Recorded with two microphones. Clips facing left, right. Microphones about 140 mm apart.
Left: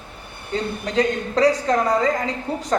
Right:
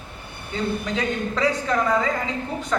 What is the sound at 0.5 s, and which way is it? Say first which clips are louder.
Speech: left 4 dB; 35° left (ahead or behind).